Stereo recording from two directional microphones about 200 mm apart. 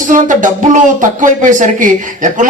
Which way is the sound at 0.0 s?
40° right (ahead or behind).